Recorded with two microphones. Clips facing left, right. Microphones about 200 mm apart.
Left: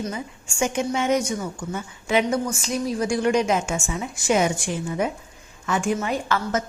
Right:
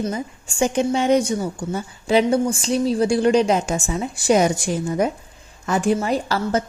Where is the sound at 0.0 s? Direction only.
35° right (ahead or behind).